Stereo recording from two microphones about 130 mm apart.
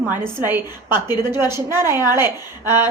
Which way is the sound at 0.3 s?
15° right (ahead or behind).